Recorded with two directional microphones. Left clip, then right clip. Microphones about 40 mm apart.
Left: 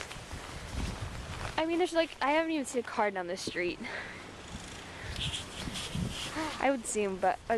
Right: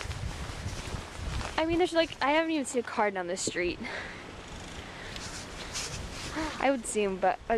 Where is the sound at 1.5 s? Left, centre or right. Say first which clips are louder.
Right 3 dB; centre.